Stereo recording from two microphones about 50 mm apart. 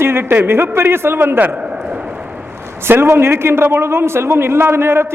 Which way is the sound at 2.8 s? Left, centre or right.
Right.